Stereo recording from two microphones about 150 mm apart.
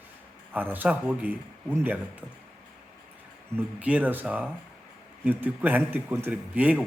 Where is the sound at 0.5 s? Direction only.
10° right (ahead or behind).